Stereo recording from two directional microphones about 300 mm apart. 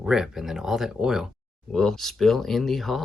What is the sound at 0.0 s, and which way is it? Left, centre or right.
Speech, centre.